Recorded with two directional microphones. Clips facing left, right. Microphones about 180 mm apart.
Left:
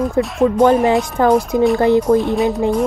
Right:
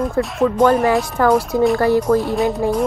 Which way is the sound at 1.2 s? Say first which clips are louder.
Left 1 dB; 20° left (ahead or behind).